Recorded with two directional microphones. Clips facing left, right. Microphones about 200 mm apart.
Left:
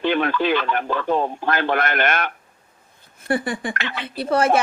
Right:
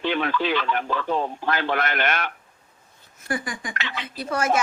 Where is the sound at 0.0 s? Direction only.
50° left (ahead or behind).